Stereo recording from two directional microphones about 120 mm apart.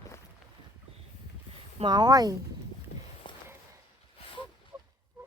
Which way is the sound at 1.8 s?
35° right (ahead or behind).